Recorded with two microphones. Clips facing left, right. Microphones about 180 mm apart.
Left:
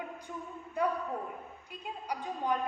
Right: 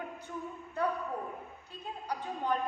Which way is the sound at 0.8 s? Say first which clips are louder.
Left 1 dB; 10° left (ahead or behind).